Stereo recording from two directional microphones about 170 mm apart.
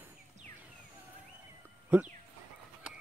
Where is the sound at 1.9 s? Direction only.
10° right (ahead or behind).